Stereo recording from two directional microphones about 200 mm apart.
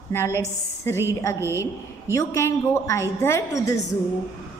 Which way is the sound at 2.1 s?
15° left (ahead or behind).